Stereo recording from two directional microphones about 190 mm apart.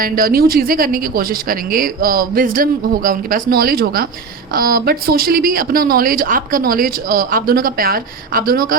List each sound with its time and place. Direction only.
0.0 s speech: 50° right (ahead or behind)